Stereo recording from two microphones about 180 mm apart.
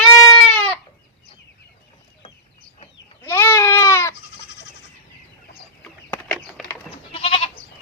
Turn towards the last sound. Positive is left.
turn(degrees=30)  # may be behind; listen again after turning